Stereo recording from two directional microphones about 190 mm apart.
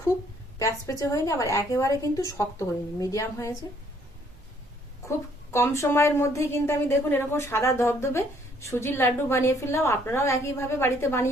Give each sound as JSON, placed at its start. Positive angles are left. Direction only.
{"t": 0.6, "sound": "a woman's voice", "side_deg": 15}
{"t": 5.0, "sound": "a woman's voice", "side_deg": 15}